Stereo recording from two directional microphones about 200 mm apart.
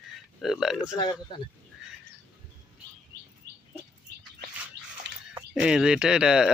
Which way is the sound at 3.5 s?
20° right (ahead or behind).